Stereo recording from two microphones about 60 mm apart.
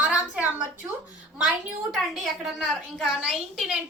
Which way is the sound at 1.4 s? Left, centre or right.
Centre.